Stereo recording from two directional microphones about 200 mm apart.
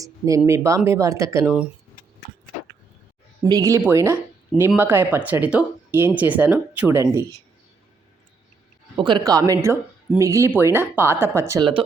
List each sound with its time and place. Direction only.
0.0 s speech: 15° right (ahead or behind)
3.4 s speech: 15° right (ahead or behind)
9.0 s speech: 25° right (ahead or behind)